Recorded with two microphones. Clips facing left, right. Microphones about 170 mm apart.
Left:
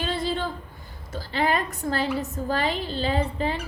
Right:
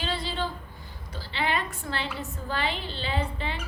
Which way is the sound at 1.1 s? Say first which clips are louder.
Left 5 dB; 45° left (ahead or behind).